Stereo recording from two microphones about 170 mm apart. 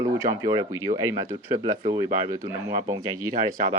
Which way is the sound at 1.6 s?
40° right (ahead or behind).